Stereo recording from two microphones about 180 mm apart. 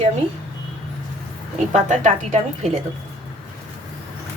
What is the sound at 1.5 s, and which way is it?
Speech, 40° right (ahead or behind).